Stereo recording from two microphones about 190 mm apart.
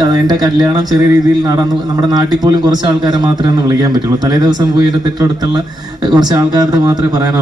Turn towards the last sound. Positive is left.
turn(degrees=-20)  # may be behind; listen again after turning